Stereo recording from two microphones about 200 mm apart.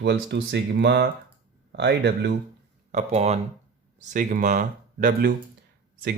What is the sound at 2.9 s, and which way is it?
Speech, 35° right (ahead or behind).